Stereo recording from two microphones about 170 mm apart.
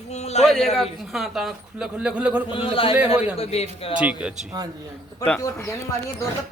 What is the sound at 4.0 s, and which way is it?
Speech, 5° right (ahead or behind).